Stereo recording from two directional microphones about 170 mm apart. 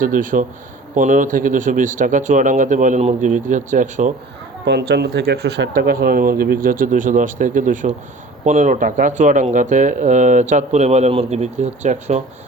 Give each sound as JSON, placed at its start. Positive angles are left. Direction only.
{"t": 0.0, "sound": "speech", "side_deg": -50}
{"t": 4.6, "sound": "speech", "side_deg": -75}